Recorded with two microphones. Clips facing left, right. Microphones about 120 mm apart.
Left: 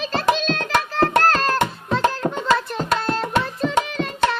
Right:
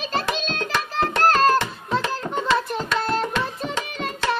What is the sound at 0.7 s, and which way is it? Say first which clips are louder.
Music: left 5 dB; 55° left (ahead or behind).